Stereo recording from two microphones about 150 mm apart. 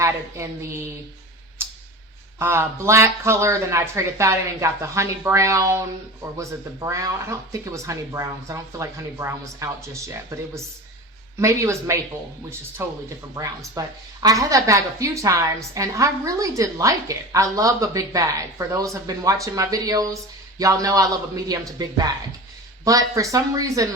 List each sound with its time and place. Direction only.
0.0 s a woman's voice: 20° right (ahead or behind)
2.4 s a woman's voice: 15° right (ahead or behind)